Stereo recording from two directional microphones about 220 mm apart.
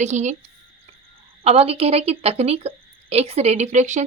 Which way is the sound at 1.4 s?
25° right (ahead or behind).